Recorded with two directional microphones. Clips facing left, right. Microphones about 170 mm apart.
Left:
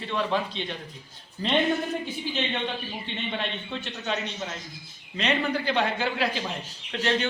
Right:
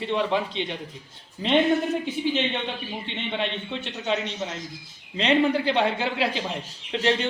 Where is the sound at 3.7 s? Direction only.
20° right (ahead or behind).